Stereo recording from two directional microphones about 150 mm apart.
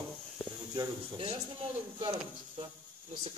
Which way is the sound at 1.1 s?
40° right (ahead or behind).